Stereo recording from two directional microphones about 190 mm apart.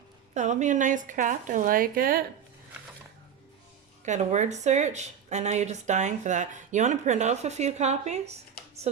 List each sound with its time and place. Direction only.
0.3 s speech: 40° right (ahead or behind)
4.0 s speech: 40° right (ahead or behind)
8.6 s computer keyboard: 50° left (ahead or behind)